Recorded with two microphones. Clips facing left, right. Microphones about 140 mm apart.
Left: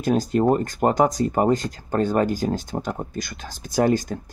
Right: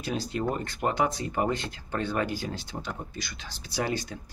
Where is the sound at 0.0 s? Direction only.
45° left (ahead or behind).